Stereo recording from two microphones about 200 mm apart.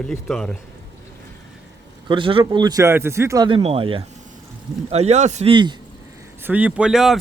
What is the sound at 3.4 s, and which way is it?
A man's voice, 30° right (ahead or behind).